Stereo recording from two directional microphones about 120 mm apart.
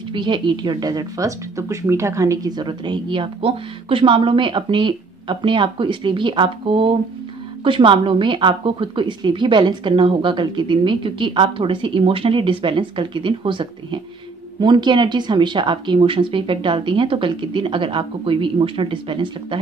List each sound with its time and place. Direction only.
0.1 s a woman's voice: 40° right (ahead or behind)